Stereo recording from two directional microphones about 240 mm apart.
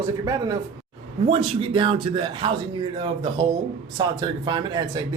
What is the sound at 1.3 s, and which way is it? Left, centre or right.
A man's voice, right.